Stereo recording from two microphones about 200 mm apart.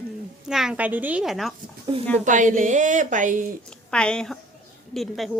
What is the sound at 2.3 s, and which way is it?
A woman's voice, 40° right (ahead or behind).